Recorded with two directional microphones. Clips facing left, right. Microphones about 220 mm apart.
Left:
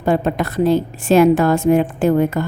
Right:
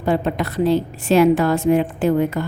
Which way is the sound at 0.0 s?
45° left (ahead or behind).